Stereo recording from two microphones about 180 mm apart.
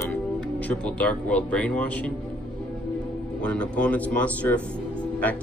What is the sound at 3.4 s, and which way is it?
Speech, 5° left (ahead or behind).